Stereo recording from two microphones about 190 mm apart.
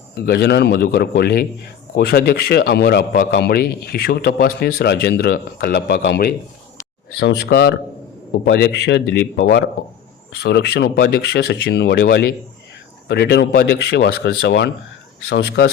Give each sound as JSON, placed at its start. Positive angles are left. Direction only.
{"t": 0.3, "sound": "a man's voice", "side_deg": 60}
{"t": 7.2, "sound": "a man's voice", "side_deg": 70}